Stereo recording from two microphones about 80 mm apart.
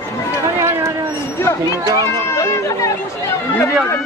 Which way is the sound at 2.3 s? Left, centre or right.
Left.